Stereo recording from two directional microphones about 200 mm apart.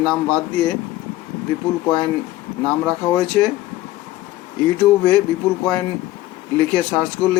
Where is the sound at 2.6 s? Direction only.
5° left (ahead or behind).